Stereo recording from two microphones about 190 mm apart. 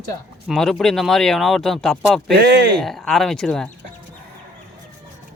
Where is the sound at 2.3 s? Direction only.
60° right (ahead or behind).